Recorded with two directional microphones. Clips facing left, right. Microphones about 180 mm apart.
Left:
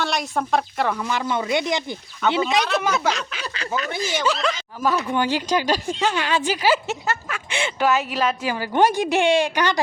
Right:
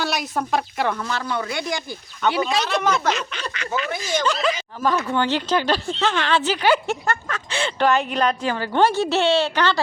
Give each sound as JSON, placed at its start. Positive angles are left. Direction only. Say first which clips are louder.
{"t": 0.0, "sound": "speech", "louder": "even", "side_deg": 0}
{"t": 0.9, "sound": "speech", "louder": "left 2 dB", "side_deg": 15}
{"t": 2.6, "sound": "speech", "louder": "right 1 dB", "side_deg": 5}
{"t": 3.8, "sound": "speech", "louder": "left 1 dB", "side_deg": 35}
{"t": 4.1, "sound": "speech", "louder": "right 2 dB", "side_deg": 5}
{"t": 4.8, "sound": "speech", "louder": "left 1 dB", "side_deg": 10}